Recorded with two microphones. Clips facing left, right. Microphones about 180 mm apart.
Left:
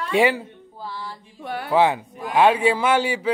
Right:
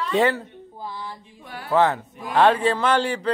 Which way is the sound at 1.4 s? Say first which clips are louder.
Left 11 dB; 65° left (ahead or behind).